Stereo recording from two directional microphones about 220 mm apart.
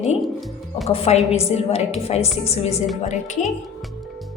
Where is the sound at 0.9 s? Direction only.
25° left (ahead or behind).